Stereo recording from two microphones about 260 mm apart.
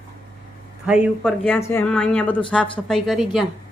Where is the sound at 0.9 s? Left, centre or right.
Centre.